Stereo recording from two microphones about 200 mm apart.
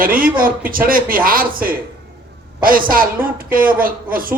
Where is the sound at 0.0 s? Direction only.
45° right (ahead or behind).